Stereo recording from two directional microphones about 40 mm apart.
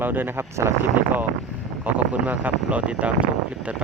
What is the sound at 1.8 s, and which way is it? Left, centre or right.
Speech, right.